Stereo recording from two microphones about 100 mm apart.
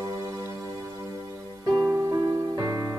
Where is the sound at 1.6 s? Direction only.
40° right (ahead or behind).